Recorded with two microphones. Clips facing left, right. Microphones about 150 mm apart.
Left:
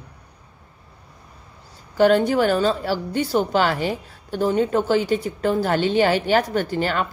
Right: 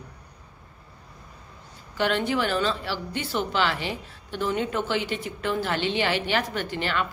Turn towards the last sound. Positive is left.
turn(degrees=40)  # may be behind; listen again after turning